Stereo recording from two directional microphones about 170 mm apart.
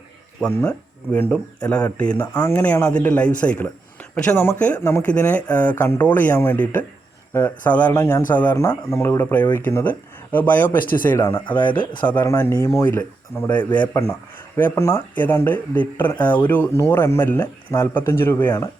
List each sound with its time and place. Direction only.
0.4 s speech: 10° left (ahead or behind)
11.4 s speech: 25° left (ahead or behind)
11.9 s speech: 10° left (ahead or behind)